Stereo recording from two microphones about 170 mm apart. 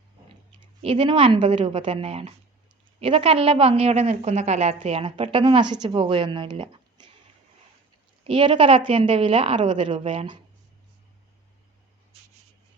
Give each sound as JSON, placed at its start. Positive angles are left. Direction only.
{"t": 0.5, "sound": "a woman's voice", "side_deg": -30}
{"t": 8.2, "sound": "a woman's voice", "side_deg": -30}